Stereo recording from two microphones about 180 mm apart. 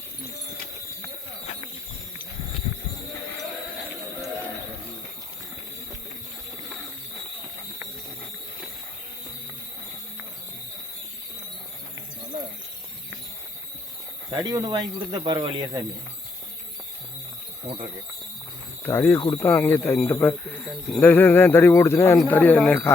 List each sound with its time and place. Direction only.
14.3 s speech: 20° right (ahead or behind)
18.9 s speech: 15° left (ahead or behind)
19.2 s speech: 25° left (ahead or behind)
19.5 s speech: 15° left (ahead or behind)